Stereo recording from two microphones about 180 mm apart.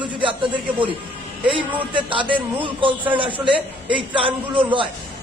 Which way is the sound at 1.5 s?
25° right (ahead or behind).